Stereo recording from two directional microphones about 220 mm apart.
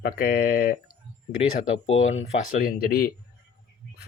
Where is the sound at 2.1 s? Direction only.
30° left (ahead or behind).